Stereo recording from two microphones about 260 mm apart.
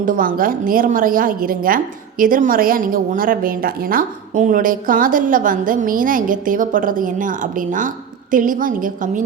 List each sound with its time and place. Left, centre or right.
0.0 s a woman's voice: right